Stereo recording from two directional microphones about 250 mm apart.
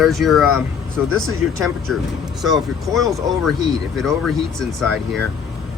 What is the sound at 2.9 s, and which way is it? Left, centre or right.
Speech, centre.